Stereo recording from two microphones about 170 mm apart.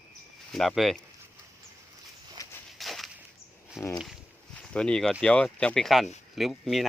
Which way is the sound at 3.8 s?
15° left (ahead or behind).